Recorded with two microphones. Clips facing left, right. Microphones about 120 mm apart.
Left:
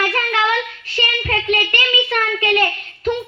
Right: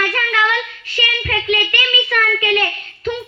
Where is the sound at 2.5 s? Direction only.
35° left (ahead or behind).